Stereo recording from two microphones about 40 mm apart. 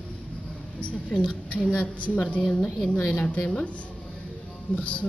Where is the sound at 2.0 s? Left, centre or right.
Left.